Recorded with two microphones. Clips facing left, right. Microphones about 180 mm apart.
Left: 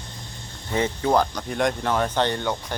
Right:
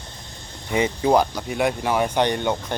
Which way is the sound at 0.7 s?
15° right (ahead or behind).